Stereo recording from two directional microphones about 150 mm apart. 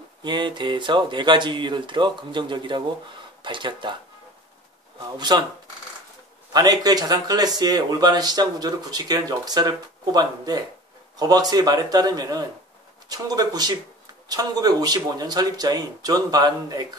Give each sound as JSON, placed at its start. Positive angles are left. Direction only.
{"t": 0.2, "sound": "speech", "side_deg": -30}
{"t": 5.1, "sound": "speech", "side_deg": -30}
{"t": 6.5, "sound": "speech", "side_deg": -25}